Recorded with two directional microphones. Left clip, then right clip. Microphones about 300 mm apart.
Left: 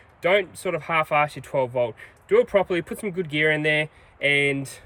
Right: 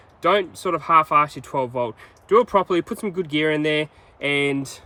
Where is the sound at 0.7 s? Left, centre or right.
Centre.